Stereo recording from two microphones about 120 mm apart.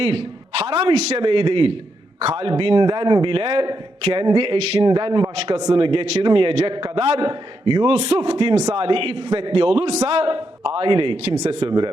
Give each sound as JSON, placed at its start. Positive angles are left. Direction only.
{"t": 0.0, "sound": "a man's voice", "side_deg": -50}
{"t": 4.9, "sound": "a man's voice", "side_deg": -45}